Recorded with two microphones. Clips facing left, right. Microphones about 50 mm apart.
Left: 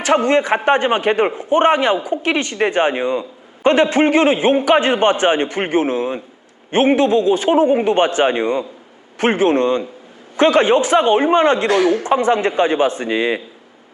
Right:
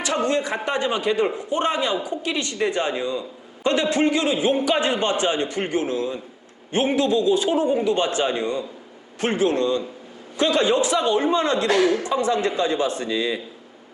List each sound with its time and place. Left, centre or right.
0.0 s a man's voice: left